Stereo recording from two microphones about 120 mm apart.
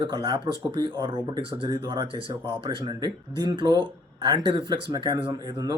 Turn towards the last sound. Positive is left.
turn(degrees=-40)  # may be behind; listen again after turning